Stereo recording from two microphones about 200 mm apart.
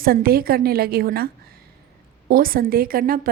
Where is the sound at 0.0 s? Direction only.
50° right (ahead or behind).